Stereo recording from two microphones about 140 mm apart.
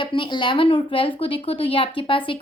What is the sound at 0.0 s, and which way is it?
A woman's voice, 35° left (ahead or behind).